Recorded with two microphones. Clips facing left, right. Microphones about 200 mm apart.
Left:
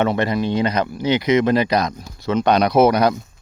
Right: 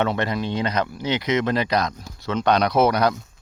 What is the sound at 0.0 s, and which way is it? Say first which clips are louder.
Speech: left 4 dB; 5° left (ahead or behind).